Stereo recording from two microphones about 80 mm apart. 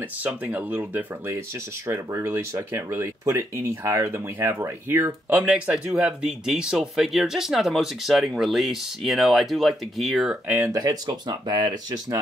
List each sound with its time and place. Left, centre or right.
0.0 s speech: centre
1.9 s speech: right
5.4 s speech: centre
10.3 s speech: right
10.7 s speech: right